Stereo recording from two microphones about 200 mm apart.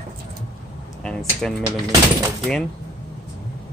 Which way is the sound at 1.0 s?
5° left (ahead or behind).